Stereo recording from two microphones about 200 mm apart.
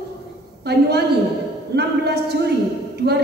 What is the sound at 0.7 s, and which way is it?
A woman's voice, 55° right (ahead or behind).